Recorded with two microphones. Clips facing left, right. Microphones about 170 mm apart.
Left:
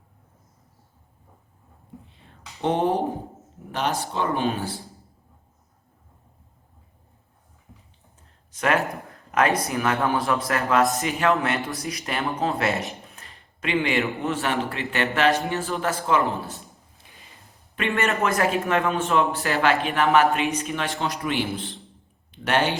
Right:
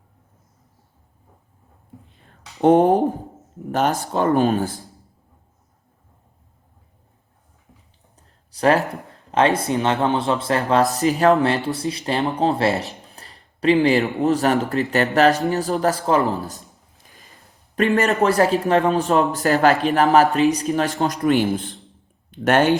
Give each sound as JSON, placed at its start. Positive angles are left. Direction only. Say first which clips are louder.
{"t": 2.6, "sound": "a man's voice", "louder": "right 8 dB", "side_deg": -45}
{"t": 8.1, "sound": "a sound", "louder": "right 2 dB", "side_deg": -35}
{"t": 9.3, "sound": "speech", "louder": "right 4 dB", "side_deg": -30}
{"t": 17.7, "sound": "a man's voice", "louder": "right 6 dB", "side_deg": -40}